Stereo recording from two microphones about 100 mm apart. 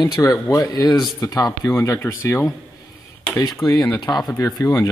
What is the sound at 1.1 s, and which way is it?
Speech, 30° left (ahead or behind).